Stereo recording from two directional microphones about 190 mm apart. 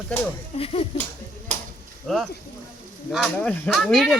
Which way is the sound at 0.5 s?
30° left (ahead or behind).